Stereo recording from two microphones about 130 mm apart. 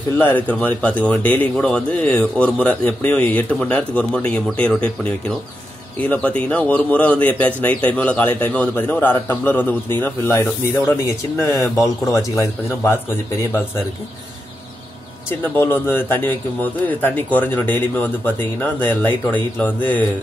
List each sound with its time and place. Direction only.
0.2 s a man's voice: 15° left (ahead or behind)
15.4 s a man's voice: 15° left (ahead or behind)